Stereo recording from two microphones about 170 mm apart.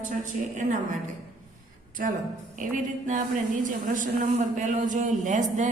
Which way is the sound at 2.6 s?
50° right (ahead or behind).